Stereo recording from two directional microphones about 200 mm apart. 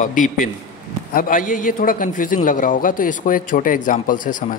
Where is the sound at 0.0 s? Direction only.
40° left (ahead or behind).